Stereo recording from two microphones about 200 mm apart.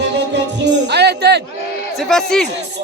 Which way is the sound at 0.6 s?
60° right (ahead or behind).